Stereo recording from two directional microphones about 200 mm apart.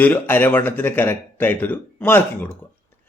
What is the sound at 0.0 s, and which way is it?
A man's voice, 10° left (ahead or behind).